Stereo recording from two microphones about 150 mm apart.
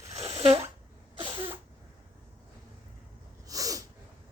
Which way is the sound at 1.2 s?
35° right (ahead or behind).